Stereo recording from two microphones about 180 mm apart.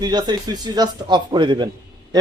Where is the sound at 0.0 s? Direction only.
25° right (ahead or behind).